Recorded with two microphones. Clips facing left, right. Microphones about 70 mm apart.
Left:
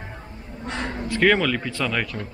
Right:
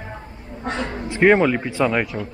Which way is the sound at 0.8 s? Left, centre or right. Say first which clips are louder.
Right 3 dB; centre.